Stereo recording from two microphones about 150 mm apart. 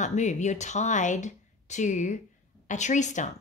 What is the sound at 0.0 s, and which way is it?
Speech, 55° left (ahead or behind).